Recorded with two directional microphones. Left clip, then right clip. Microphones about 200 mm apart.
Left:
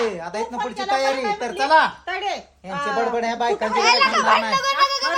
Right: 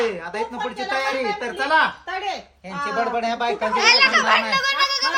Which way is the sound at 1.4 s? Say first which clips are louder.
Left 3 dB; 55° left (ahead or behind).